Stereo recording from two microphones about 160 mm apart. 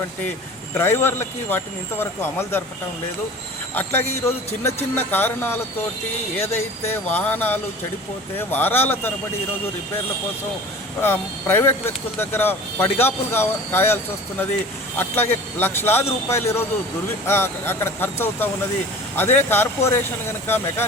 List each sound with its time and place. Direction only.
0.7 s speech: 15° left (ahead or behind)
4.3 s speech: 15° left (ahead or behind)
11.0 s speech: 15° left (ahead or behind)